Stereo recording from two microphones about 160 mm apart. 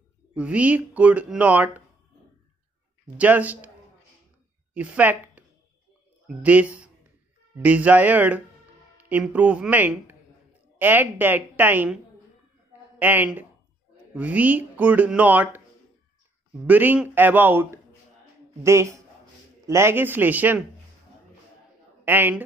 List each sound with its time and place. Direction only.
0.3 s speech: 10° right (ahead or behind)
3.2 s speech: 10° right (ahead or behind)
4.7 s a woman's voice: 10° right (ahead or behind)
13.0 s speech: 10° right (ahead or behind)
16.6 s speech: 10° right (ahead or behind)
22.0 s speech: 10° right (ahead or behind)